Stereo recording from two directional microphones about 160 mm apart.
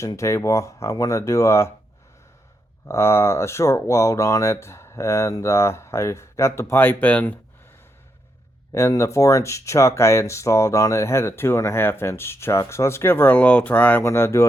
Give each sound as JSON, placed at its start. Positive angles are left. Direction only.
{"t": 0.0, "sound": "speech", "side_deg": 20}
{"t": 2.8, "sound": "speech", "side_deg": 15}
{"t": 8.7, "sound": "speech", "side_deg": 15}